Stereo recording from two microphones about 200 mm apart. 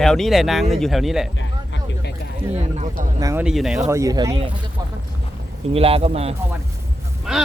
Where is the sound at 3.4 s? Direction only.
Centre (ahead or behind).